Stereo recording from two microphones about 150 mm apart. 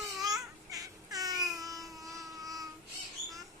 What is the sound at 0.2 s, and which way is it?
Babbling, 25° right (ahead or behind).